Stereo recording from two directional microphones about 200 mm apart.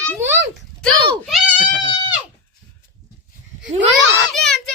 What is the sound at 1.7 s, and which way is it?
Speech, 20° left (ahead or behind).